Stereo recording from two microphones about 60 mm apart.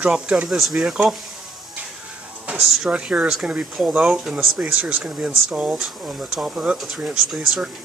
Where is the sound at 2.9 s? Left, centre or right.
Right.